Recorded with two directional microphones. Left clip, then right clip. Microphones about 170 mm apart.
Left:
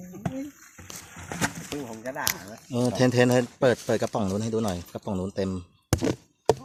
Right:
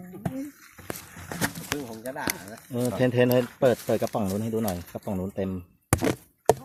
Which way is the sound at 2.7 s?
20° left (ahead or behind).